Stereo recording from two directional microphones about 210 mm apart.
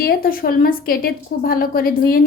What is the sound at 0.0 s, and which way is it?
A woman's voice, 45° left (ahead or behind).